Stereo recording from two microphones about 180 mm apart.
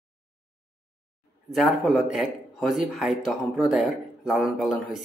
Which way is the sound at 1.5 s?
Centre (ahead or behind).